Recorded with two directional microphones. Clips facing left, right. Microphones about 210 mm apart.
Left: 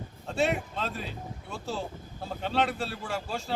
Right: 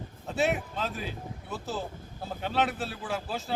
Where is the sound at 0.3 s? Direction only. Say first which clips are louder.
Even; 5° right (ahead or behind).